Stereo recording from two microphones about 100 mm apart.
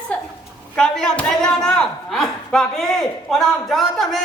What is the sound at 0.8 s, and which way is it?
Speech, 5° left (ahead or behind).